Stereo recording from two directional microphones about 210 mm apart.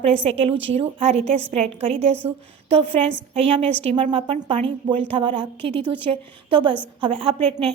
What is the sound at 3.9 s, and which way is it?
A woman's voice, 25° right (ahead or behind).